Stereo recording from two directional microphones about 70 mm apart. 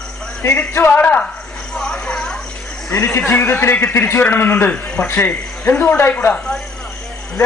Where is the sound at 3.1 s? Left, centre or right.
Left.